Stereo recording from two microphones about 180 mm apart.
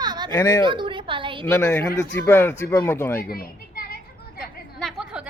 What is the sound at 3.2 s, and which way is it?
Children playing, 55° left (ahead or behind).